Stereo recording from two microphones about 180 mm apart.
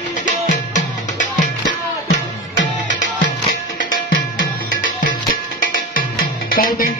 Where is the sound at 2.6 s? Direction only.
80° left.